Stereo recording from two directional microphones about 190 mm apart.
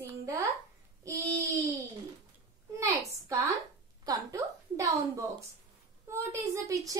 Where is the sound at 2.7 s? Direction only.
15° right (ahead or behind).